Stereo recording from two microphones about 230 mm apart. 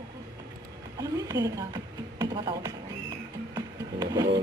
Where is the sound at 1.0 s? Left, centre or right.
Centre.